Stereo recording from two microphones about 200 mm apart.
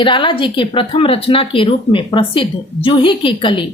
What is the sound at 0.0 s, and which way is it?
Speech, 25° left (ahead or behind).